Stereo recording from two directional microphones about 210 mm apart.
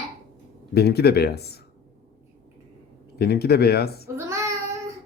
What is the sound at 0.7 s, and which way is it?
Speech, 50° left (ahead or behind).